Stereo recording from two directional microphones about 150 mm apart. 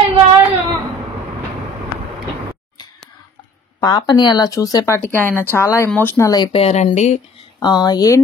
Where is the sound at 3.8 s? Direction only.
30° left (ahead or behind).